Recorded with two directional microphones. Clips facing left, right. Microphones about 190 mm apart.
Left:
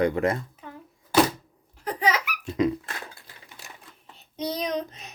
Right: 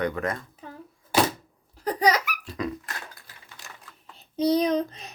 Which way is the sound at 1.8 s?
40° right (ahead or behind).